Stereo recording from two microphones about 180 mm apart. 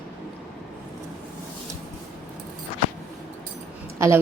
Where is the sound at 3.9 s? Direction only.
15° right (ahead or behind).